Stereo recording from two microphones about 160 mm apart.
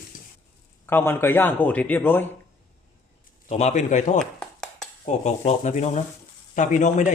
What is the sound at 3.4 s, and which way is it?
Speech, 45° left (ahead or behind).